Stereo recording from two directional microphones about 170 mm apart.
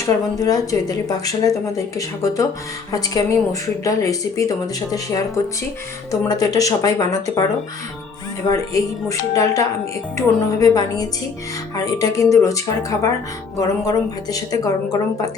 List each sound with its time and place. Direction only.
0.0 s speech: 20° left (ahead or behind)
8.4 s speech: 20° left (ahead or behind)